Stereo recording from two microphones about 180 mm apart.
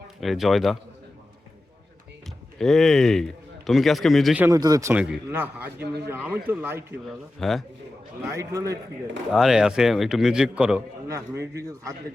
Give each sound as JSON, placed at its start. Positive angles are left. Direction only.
{"t": 0.2, "sound": "a man's voice", "side_deg": 0}
{"t": 2.6, "sound": "a man's voice", "side_deg": 0}
{"t": 4.4, "sound": "a man's voice", "side_deg": -20}
{"t": 7.0, "sound": "a man's voice", "side_deg": 0}
{"t": 8.3, "sound": "a man's voice", "side_deg": -20}
{"t": 9.3, "sound": "a man's voice", "side_deg": 0}